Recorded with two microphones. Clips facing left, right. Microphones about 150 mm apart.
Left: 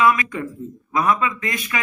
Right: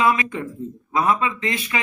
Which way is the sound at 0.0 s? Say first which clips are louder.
Left 2 dB; 30° right (ahead or behind).